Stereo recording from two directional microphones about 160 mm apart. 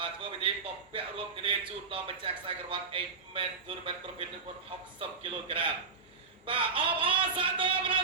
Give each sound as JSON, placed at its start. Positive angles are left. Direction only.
{"t": 0.0, "sound": "a man's voice", "side_deg": -30}